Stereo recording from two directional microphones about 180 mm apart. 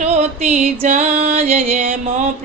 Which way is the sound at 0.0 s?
35° right (ahead or behind).